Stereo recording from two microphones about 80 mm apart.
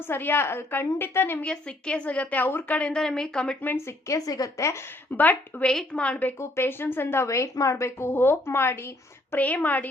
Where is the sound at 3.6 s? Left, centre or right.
Left.